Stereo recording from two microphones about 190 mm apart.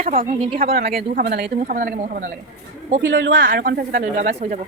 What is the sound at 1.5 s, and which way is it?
Speech, 45° right (ahead or behind).